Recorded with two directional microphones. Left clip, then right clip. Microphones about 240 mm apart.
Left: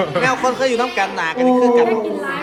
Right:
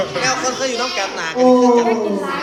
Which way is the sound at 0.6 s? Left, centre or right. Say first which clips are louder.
Left 3 dB; left.